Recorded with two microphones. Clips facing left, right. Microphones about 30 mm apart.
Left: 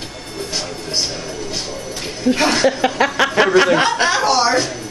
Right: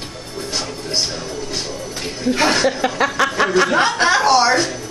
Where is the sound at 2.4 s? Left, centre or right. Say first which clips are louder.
Even; centre.